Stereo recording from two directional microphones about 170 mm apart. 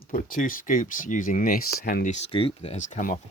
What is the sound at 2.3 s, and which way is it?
Speech, 30° left (ahead or behind).